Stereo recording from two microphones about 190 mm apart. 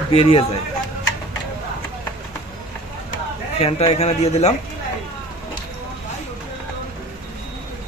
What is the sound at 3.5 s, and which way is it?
Speech, 30° left (ahead or behind).